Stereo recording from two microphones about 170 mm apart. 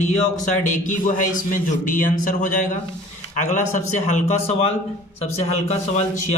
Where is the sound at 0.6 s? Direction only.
45° left (ahead or behind).